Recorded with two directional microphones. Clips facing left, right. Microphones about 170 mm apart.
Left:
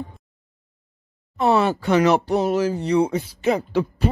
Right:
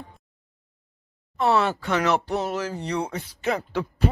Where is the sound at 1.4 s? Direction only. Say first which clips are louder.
Left 3 dB; 10° left (ahead or behind).